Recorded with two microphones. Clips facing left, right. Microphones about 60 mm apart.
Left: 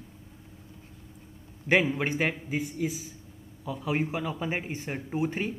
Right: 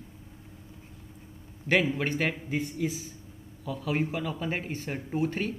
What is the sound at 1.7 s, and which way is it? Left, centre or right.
Speech, centre.